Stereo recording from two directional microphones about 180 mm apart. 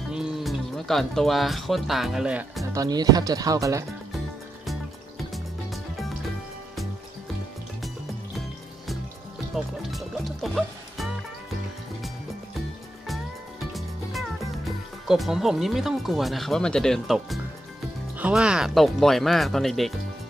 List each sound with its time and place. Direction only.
0.1 s speech: centre (ahead or behind)
2.7 s speech: 20° right (ahead or behind)
5.3 s music: centre (ahead or behind)
9.8 s music: centre (ahead or behind)
13.7 s music: centre (ahead or behind)
15.0 s speech: centre (ahead or behind)